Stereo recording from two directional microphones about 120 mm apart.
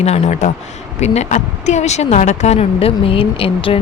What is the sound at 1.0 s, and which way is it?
A woman's voice, 80° left.